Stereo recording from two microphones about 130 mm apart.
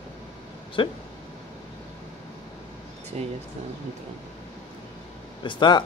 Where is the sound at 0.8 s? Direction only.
40° left (ahead or behind).